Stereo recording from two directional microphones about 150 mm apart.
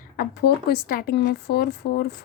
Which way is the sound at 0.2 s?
90° left.